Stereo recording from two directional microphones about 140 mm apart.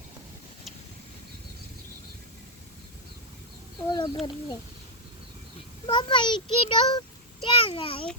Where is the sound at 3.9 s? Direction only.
30° left (ahead or behind).